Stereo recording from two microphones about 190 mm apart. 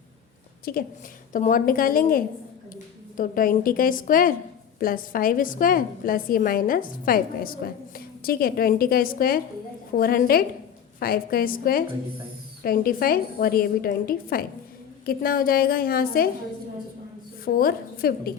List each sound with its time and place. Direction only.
0.6 s a woman's voice: 50° left (ahead or behind)
17.4 s a woman's voice: 50° left (ahead or behind)